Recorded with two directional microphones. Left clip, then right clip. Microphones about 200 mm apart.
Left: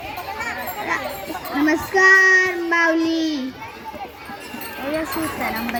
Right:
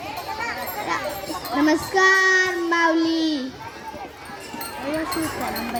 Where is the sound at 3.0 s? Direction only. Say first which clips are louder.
Left 1 dB; 65° right (ahead or behind).